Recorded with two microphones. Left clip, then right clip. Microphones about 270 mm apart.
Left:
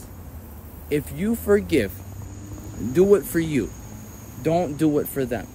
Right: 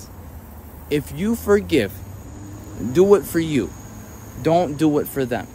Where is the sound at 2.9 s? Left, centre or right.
Centre.